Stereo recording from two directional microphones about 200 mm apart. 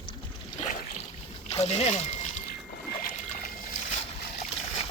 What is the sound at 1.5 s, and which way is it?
Speech, 30° left (ahead or behind).